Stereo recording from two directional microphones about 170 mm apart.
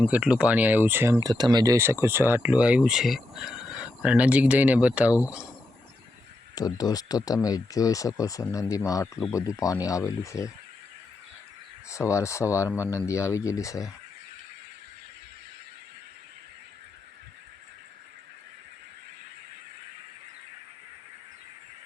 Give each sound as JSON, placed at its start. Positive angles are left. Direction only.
{"t": 0.1, "sound": "speech", "side_deg": -5}
{"t": 5.1, "sound": "speech", "side_deg": 20}
{"t": 6.6, "sound": "speech", "side_deg": 20}
{"t": 11.9, "sound": "speech", "side_deg": 15}